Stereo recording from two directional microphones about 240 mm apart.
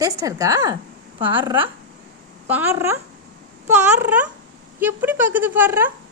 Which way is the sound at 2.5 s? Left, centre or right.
Centre.